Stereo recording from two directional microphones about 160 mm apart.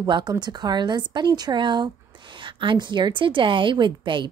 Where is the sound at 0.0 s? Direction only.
25° right (ahead or behind).